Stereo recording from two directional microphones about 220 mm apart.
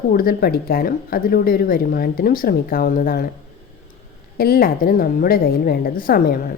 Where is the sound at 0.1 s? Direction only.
40° left (ahead or behind).